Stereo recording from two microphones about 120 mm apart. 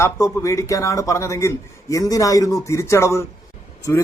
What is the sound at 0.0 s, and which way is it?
Speech, 25° left (ahead or behind).